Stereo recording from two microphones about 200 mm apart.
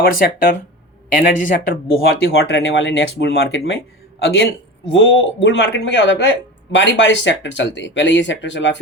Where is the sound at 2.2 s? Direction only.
55° left (ahead or behind).